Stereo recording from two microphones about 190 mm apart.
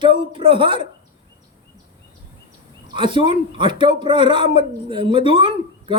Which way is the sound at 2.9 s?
25° right (ahead or behind).